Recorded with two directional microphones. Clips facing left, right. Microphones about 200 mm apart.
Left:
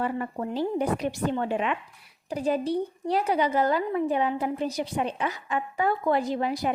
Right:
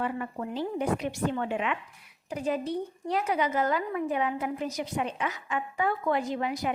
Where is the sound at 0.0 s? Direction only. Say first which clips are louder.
Left 3 dB; 35° left (ahead or behind).